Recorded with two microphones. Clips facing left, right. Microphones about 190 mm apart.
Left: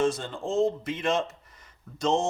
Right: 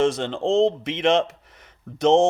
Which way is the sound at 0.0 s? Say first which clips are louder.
Right 6 dB; 90° right.